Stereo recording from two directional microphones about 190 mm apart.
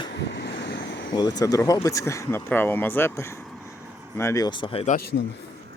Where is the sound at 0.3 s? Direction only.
65° left (ahead or behind).